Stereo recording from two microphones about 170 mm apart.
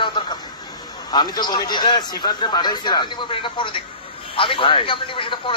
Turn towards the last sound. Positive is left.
turn(degrees=30)  # may be behind; listen again after turning